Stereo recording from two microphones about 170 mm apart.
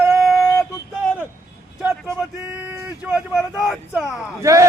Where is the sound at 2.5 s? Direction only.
10° right (ahead or behind).